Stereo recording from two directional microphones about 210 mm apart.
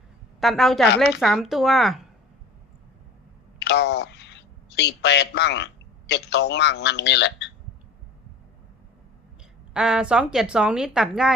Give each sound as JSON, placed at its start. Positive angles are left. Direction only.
{"t": 0.3, "sound": "a woman's voice", "side_deg": 0}
{"t": 3.6, "sound": "speech", "side_deg": 55}
{"t": 9.7, "sound": "a woman's voice", "side_deg": -5}